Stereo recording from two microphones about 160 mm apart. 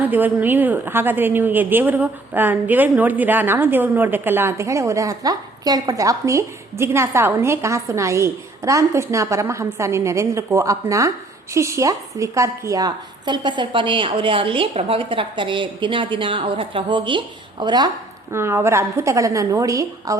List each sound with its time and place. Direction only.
0.0 s a woman's voice: 10° right (ahead or behind)